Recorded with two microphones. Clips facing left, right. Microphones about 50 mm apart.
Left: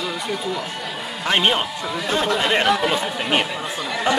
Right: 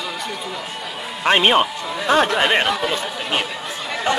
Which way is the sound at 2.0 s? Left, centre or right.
Right.